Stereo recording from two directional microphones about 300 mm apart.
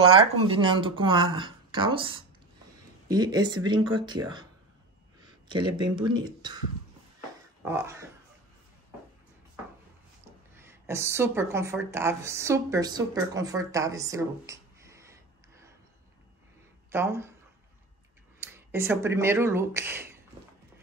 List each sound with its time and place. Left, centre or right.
0.5 s speech: centre
5.2 s a sound: centre
5.9 s speech: centre
7.6 s speech: centre
10.5 s speech: centre
16.9 s speech: centre
18.4 s speech: centre